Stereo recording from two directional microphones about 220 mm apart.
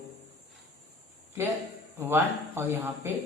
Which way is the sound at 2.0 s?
10° right (ahead or behind).